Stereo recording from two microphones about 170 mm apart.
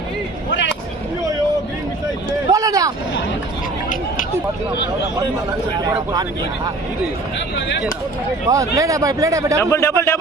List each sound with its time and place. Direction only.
2.5 s vehicle: 20° right (ahead or behind)
8.4 s speech: 20° right (ahead or behind)
9.6 s speech: 15° left (ahead or behind)